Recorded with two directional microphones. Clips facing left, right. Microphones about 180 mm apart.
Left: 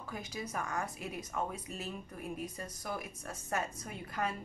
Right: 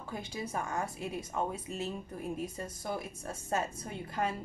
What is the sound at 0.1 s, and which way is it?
Speech, 30° right (ahead or behind).